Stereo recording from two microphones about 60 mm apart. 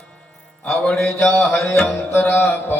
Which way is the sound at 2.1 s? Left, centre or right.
Left.